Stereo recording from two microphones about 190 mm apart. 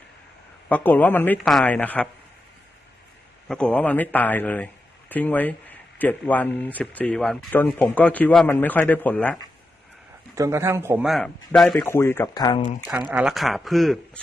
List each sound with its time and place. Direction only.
0.7 s speech: 10° left (ahead or behind)
3.5 s speech: 5° left (ahead or behind)
10.3 s speech: 15° right (ahead or behind)
11.0 s speech: centre (ahead or behind)
11.9 s speech: 10° left (ahead or behind)
13.1 s speech: 5° right (ahead or behind)